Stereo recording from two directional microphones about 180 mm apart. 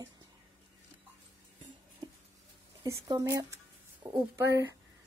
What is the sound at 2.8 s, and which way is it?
Speech, 15° right (ahead or behind).